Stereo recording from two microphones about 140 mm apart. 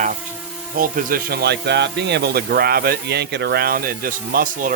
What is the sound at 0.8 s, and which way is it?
Speech, 80° right.